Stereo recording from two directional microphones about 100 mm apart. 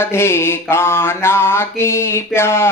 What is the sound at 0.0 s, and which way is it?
Mantra, 25° left (ahead or behind).